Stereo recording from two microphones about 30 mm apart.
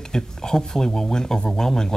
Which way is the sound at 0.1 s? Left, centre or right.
Left.